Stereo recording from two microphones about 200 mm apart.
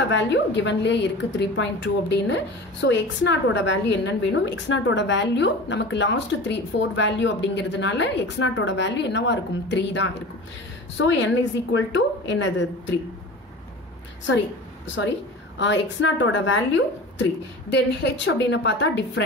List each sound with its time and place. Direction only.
0.1 s a woman's voice: 60° left (ahead or behind)
15.6 s a woman's voice: 65° left (ahead or behind)